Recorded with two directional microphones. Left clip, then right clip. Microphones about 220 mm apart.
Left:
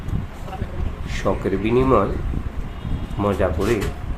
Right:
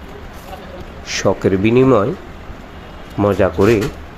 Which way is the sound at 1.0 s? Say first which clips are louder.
Right 7 dB; 25° right (ahead or behind).